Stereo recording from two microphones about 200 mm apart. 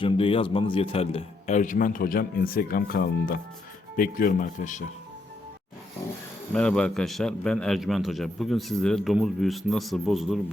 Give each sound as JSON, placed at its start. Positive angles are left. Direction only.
{"t": 0.0, "sound": "a man's voice", "side_deg": 25}
{"t": 6.5, "sound": "a man's voice", "side_deg": 5}